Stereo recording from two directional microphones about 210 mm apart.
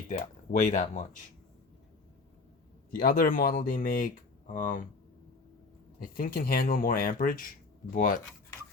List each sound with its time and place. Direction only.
0.1 s speech: 35° left (ahead or behind)
2.9 s speech: 45° left (ahead or behind)
6.0 s speech: 40° left (ahead or behind)